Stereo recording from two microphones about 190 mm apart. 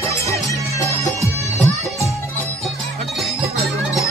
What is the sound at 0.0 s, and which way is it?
Music, 15° left (ahead or behind).